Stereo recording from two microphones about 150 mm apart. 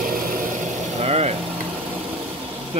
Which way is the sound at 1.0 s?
45° right (ahead or behind).